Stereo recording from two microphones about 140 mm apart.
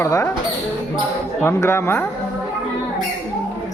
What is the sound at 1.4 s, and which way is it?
Speech, 20° left (ahead or behind).